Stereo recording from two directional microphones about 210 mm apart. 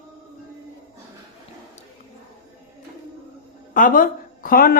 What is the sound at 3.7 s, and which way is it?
Speech, 40° left (ahead or behind).